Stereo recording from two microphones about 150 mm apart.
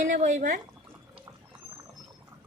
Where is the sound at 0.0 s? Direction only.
55° right (ahead or behind).